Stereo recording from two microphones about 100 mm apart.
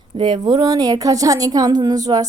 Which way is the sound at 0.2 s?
50° right (ahead or behind).